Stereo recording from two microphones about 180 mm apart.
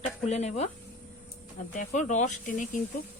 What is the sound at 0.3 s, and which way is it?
Speech, 35° left (ahead or behind).